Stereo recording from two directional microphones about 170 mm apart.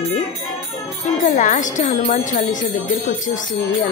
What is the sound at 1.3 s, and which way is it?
Music, 45° left (ahead or behind).